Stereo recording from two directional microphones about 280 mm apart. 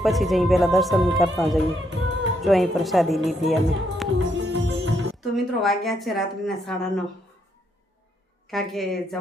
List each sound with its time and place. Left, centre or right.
0.0 s speech: centre
4.2 s music: right
5.2 s speech: centre
8.4 s speech: centre